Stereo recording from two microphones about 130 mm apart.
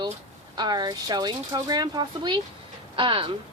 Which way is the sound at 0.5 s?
30° right (ahead or behind).